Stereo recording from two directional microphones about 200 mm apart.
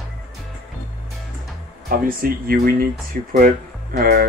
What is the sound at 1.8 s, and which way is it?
Speech, 45° right (ahead or behind).